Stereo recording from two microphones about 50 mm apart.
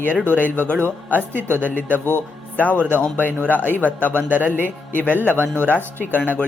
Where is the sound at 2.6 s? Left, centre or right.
Left.